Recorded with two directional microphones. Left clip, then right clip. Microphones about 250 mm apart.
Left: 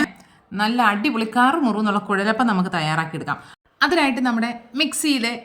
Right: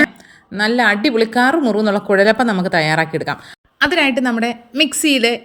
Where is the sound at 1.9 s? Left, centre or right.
Centre.